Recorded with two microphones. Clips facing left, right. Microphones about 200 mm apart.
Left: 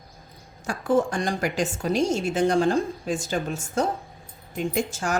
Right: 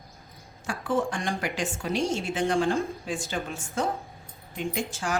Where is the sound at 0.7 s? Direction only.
40° left (ahead or behind).